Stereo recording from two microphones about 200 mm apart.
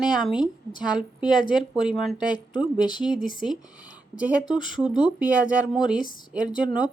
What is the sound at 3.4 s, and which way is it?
A woman's voice, 5° right (ahead or behind).